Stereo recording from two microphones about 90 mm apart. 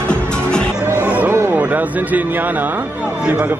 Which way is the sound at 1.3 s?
25° right (ahead or behind).